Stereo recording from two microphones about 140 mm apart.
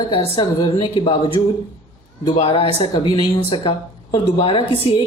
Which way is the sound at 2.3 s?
45° left (ahead or behind).